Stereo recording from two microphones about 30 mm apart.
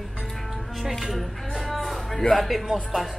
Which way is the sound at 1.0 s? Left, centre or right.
Centre.